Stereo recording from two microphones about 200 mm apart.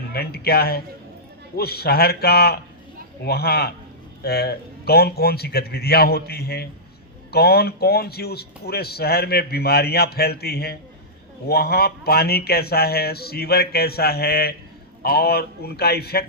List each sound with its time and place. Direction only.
0.1 s speech: 50° left (ahead or behind)